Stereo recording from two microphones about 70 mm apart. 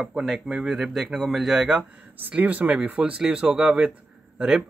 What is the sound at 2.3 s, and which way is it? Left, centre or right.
Speech, right.